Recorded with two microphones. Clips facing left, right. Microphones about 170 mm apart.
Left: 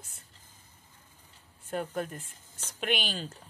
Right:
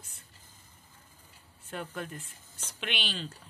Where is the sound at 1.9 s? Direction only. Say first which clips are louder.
Left 5 dB; 45° left (ahead or behind).